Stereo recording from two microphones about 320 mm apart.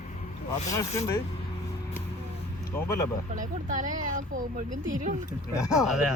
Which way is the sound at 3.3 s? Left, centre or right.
Right.